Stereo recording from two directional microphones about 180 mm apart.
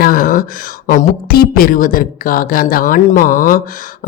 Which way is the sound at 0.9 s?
55° left (ahead or behind).